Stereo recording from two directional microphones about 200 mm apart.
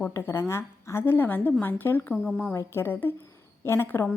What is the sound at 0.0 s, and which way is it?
A woman's voice, 10° left (ahead or behind).